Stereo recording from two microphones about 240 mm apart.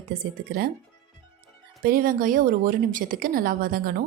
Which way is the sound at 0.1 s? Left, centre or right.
Right.